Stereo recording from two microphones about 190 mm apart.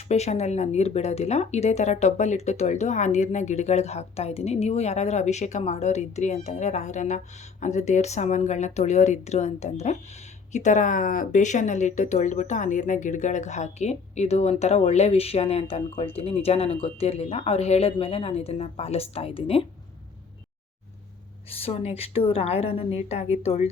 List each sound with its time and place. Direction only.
0.1 s speech: 35° left (ahead or behind)
21.5 s speech: 30° left (ahead or behind)